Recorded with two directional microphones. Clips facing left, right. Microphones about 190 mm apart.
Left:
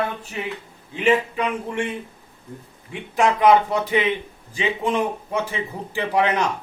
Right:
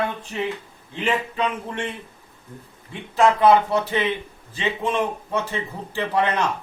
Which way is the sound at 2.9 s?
15° left (ahead or behind).